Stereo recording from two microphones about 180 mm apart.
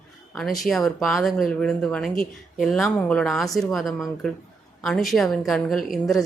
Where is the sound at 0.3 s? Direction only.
Centre (ahead or behind).